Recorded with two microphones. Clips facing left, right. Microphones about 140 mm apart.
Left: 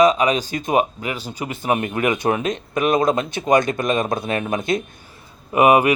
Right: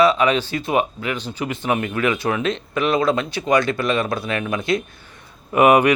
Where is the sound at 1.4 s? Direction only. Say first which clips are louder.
Left 1 dB; 35° left (ahead or behind); by 2.3 s 20° left (ahead or behind).